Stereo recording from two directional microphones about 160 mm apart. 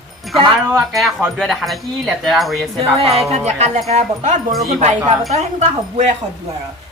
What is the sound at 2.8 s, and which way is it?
Music, 35° right (ahead or behind).